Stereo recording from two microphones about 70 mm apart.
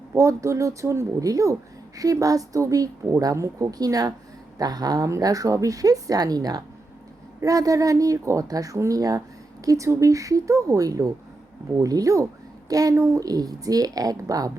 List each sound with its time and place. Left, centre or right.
0.2 s a woman's voice: right
5.1 s a woman's voice: right
7.4 s a woman's voice: right
12.9 s speech: right
13.2 s a woman's voice: right